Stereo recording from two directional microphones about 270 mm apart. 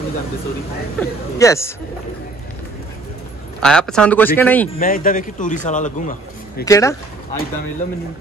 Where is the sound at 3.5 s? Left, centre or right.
Centre.